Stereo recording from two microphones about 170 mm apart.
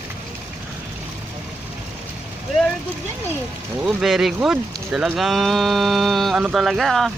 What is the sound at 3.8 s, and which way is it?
Speech, centre (ahead or behind).